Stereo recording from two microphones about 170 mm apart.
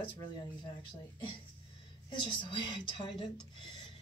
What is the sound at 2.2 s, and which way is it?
Speech, 25° left (ahead or behind).